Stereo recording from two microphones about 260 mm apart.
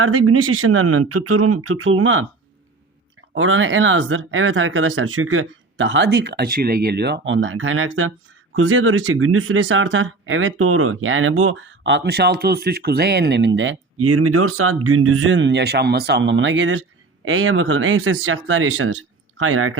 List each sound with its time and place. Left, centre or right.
0.0 s speech: right
3.3 s speech: right
13.6 s speech: right